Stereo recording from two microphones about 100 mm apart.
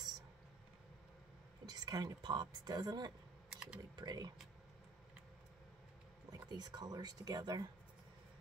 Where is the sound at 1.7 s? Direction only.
40° right (ahead or behind).